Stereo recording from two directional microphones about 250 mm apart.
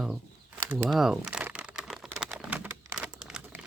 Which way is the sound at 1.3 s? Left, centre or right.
Centre.